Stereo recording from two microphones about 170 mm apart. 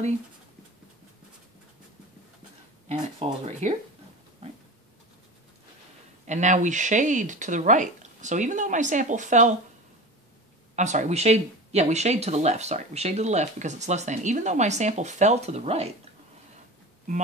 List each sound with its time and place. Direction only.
2.9 s speech: 40° right (ahead or behind)
6.2 s speech: 45° right (ahead or behind)
10.8 s speech: 45° right (ahead or behind)